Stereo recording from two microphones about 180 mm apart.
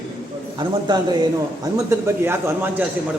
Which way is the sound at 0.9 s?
25° right (ahead or behind).